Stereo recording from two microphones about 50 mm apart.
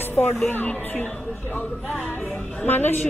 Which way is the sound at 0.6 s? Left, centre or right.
Left.